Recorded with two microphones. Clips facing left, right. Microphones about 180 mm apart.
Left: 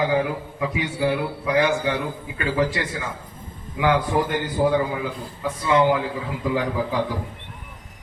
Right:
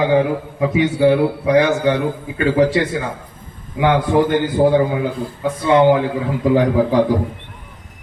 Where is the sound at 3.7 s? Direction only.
25° right (ahead or behind).